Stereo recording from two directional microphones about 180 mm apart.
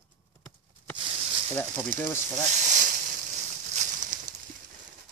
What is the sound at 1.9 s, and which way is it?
Speech, 50° right (ahead or behind).